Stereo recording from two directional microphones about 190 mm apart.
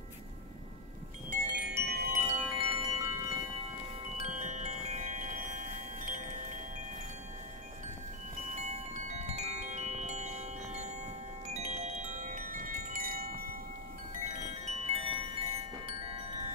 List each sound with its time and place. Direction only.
1.5 s wind chime: 65° right (ahead or behind)
2.1 s wind chime: 30° right (ahead or behind)
4.2 s wind chime: 40° right (ahead or behind)
8.5 s chime: 40° right (ahead or behind)
11.4 s wind chime: 35° right (ahead or behind)
14.2 s wind chime: 35° right (ahead or behind)